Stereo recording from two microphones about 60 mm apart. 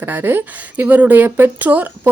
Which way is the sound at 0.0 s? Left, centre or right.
Right.